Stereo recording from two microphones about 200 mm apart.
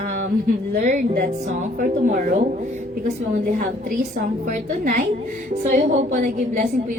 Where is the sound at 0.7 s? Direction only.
40° right (ahead or behind).